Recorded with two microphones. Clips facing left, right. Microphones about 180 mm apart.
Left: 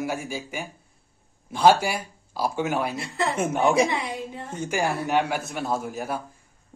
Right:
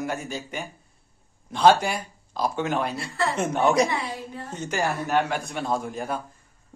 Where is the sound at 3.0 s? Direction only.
20° left (ahead or behind).